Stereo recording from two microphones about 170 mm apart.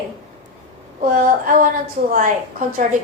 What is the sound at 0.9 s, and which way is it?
A woman's voice, 50° right (ahead or behind).